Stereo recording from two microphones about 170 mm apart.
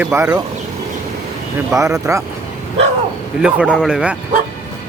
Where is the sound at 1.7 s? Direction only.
20° right (ahead or behind).